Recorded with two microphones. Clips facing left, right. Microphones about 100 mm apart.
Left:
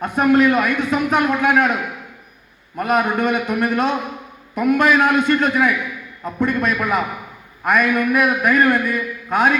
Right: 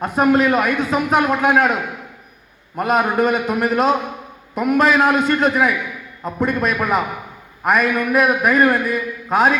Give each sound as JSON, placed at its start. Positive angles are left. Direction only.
{"t": 0.0, "sound": "a man's voice", "side_deg": -25}
{"t": 2.7, "sound": "a man's voice", "side_deg": -25}